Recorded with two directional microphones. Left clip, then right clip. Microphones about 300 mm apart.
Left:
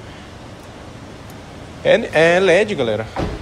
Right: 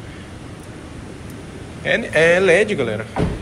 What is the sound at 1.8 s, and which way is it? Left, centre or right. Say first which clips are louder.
Speech: left 2 dB; centre.